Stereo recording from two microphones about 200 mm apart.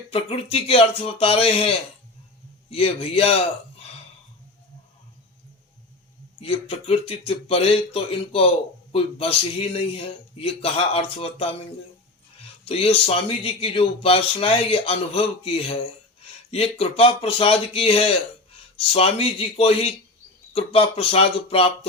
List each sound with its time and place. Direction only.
0.1 s speech: 30° left (ahead or behind)
6.4 s speech: 30° left (ahead or behind)
12.6 s speech: 30° left (ahead or behind)